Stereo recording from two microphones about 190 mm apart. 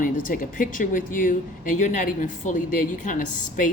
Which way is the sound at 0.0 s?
45° left (ahead or behind).